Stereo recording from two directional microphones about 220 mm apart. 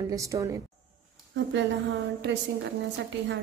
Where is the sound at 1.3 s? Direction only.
55° right (ahead or behind).